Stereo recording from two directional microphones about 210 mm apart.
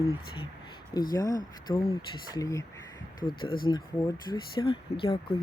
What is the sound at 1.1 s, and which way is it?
Speech, 20° left (ahead or behind).